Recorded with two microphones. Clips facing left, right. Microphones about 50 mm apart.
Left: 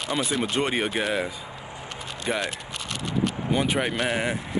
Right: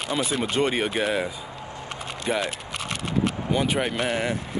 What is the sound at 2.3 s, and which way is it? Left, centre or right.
Speech, centre.